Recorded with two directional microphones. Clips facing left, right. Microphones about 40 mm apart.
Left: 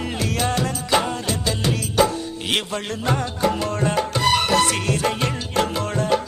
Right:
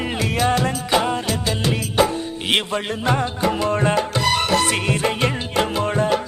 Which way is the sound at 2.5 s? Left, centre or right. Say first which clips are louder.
Right 4 dB; right.